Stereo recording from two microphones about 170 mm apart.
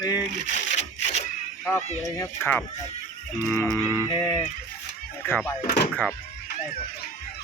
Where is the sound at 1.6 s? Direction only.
15° left (ahead or behind).